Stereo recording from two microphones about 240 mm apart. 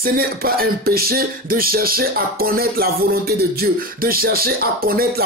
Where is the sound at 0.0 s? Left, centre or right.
Right.